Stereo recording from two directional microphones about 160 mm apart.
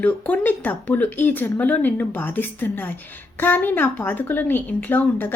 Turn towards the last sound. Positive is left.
turn(degrees=10)  # may be behind; listen again after turning